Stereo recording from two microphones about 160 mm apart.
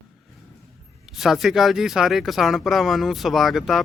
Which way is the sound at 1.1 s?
Centre (ahead or behind).